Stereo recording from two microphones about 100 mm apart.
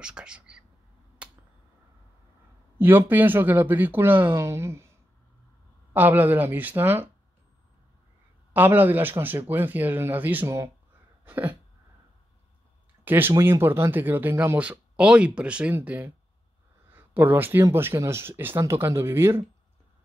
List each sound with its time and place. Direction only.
0.0 s speech: 10° right (ahead or behind)
2.8 s speech: 20° right (ahead or behind)
5.9 s speech: 20° right (ahead or behind)
8.5 s speech: 20° right (ahead or behind)
11.2 s a sound: 20° right (ahead or behind)
13.0 s speech: 20° right (ahead or behind)
14.6 s speech: 10° right (ahead or behind)